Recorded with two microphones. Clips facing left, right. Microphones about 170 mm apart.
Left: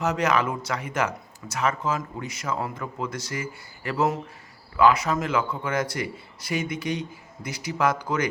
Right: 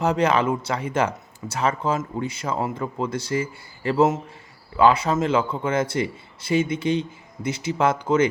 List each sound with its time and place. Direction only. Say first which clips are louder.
0.0 s speech: right 3 dB; 30° right (ahead or behind)